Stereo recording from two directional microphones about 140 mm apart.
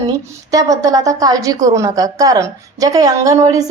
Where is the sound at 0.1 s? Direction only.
25° right (ahead or behind).